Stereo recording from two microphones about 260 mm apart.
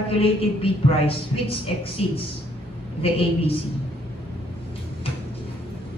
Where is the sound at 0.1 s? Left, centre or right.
Left.